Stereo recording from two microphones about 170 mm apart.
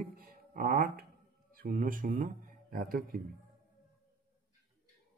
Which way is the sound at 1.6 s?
55° right (ahead or behind).